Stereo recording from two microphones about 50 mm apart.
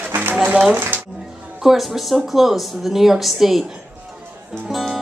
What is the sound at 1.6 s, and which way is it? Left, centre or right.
Speech, centre.